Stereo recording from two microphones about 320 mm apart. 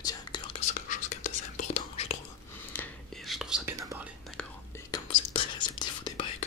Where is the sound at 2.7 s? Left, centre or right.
Centre.